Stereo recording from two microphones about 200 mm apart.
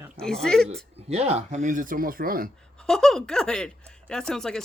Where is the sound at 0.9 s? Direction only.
30° right (ahead or behind).